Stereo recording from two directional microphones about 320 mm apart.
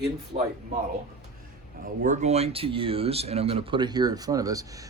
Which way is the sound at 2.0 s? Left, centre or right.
Right.